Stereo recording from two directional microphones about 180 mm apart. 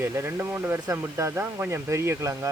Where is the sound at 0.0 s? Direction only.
15° right (ahead or behind).